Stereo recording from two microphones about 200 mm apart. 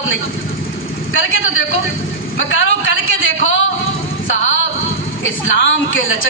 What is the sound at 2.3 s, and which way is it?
A man's voice, 75° left (ahead or behind).